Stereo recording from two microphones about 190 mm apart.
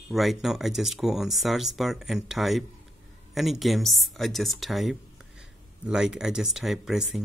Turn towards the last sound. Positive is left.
turn(degrees=0)  # may be behind; listen again after turning